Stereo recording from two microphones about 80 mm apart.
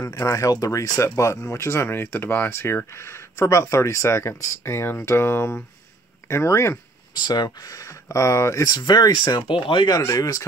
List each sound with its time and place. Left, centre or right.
0.0 s speech: left
7.2 s speech: left
9.9 s speech: left